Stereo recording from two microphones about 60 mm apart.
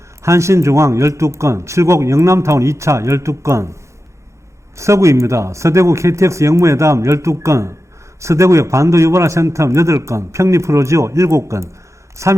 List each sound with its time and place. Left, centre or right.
0.2 s a man's voice: right
4.8 s a man's voice: right